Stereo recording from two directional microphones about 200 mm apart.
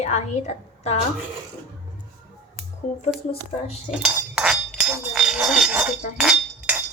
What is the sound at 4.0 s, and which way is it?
Chink, 5° right (ahead or behind).